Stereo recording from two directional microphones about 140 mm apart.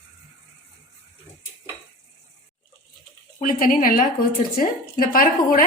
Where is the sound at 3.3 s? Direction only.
80° left.